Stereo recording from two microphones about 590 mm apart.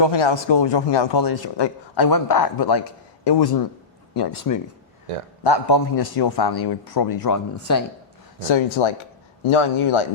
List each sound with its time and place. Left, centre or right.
0.0 s a man's voice: left
8.5 s speech: left